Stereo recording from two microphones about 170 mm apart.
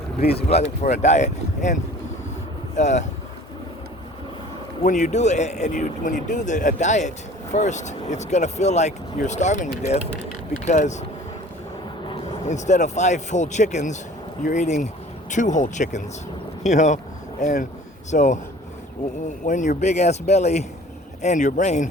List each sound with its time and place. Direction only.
0.2 s speech: 70° left (ahead or behind)
0.4 s speech: 40° left (ahead or behind)
4.8 s speech: 45° left (ahead or behind)
12.5 s speech: 45° left (ahead or behind)
19.5 s speech: 45° left (ahead or behind)